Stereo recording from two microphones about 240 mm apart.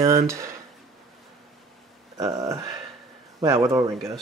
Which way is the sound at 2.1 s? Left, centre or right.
Centre.